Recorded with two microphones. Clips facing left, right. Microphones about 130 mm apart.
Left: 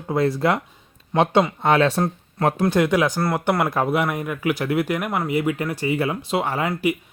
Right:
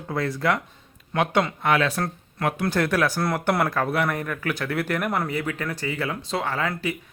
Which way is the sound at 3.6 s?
20° left (ahead or behind).